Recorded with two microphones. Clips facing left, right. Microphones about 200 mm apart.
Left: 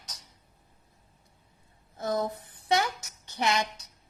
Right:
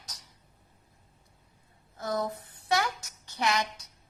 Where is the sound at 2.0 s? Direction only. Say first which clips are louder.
Left 2 dB; 20° left (ahead or behind).